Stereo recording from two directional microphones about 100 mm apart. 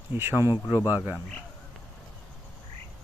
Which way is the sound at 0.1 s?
20° right (ahead or behind).